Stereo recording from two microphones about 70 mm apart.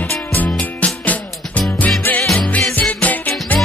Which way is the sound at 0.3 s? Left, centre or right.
Left.